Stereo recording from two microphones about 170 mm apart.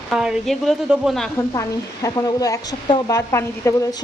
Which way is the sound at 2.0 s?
20° left (ahead or behind).